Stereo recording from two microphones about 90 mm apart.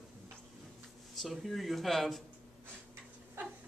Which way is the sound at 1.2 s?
Centre (ahead or behind).